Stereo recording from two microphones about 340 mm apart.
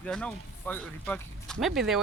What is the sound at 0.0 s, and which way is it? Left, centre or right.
Speech, centre.